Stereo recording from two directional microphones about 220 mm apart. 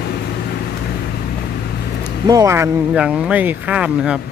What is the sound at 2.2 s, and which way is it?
Speech, 15° right (ahead or behind).